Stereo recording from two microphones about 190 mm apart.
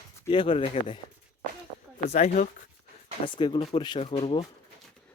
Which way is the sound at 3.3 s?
25° left (ahead or behind).